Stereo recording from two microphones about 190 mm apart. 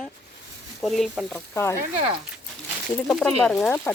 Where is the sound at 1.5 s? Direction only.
15° left (ahead or behind).